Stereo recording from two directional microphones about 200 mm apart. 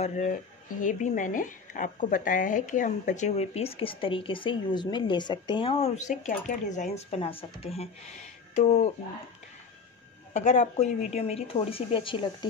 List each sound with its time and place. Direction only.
0.0 s speech: 35° left (ahead or behind)
10.3 s speech: 35° left (ahead or behind)